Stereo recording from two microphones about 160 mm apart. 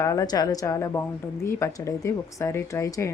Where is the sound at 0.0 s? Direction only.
20° left (ahead or behind).